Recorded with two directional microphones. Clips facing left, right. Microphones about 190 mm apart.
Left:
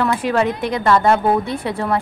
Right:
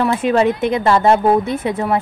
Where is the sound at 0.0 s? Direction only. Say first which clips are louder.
Right 3 dB; 20° right (ahead or behind).